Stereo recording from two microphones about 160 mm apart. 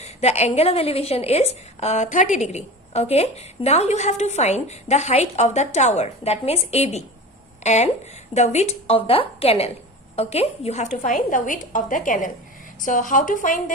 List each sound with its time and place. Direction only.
0.0 s a woman's voice: 45° left (ahead or behind)
10.9 s a woman's voice: 55° left (ahead or behind)